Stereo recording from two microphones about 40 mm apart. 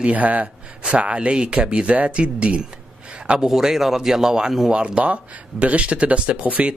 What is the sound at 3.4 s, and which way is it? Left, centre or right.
Speech, centre.